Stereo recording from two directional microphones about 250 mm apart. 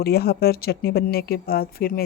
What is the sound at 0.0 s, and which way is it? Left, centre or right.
Speech, left.